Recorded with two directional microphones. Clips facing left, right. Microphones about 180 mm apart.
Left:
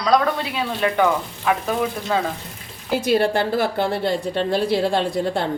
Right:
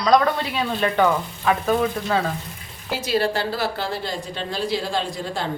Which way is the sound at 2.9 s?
55° left (ahead or behind).